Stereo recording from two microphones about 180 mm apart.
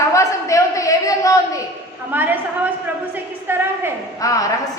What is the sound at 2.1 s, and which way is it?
Speech, 10° right (ahead or behind).